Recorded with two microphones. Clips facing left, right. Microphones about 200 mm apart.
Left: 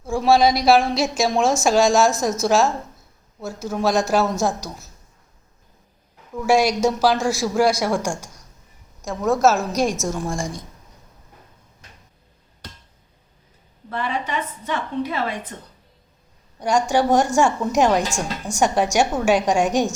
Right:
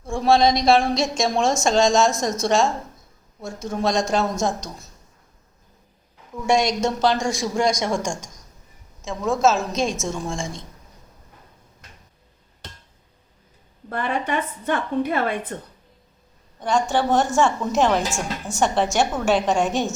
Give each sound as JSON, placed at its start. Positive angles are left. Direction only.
{"t": 0.0, "sound": "a woman's voice", "side_deg": 5}
{"t": 6.4, "sound": "a man's voice", "side_deg": 5}
{"t": 13.9, "sound": "a woman's voice", "side_deg": -50}
{"t": 16.6, "sound": "a woman's voice", "side_deg": 10}
{"t": 18.1, "sound": "a woman's voice", "side_deg": -5}
{"t": 18.6, "sound": "a man's voice", "side_deg": 10}